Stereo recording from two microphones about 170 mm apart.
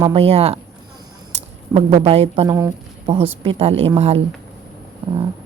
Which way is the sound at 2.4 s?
15° right (ahead or behind).